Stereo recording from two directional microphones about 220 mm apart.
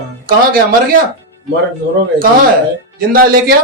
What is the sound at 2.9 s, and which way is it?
Speech, 40° right (ahead or behind).